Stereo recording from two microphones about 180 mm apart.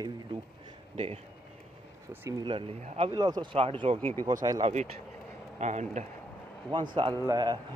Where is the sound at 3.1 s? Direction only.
20° right (ahead or behind).